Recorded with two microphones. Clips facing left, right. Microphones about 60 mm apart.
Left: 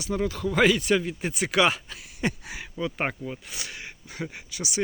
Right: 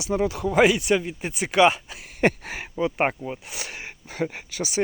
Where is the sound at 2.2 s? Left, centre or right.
Right.